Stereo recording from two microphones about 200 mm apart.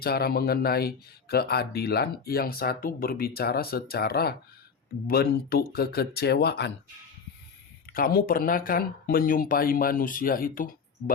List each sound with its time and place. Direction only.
0.0 s speech: 50° left (ahead or behind)
7.9 s speech: 45° left (ahead or behind)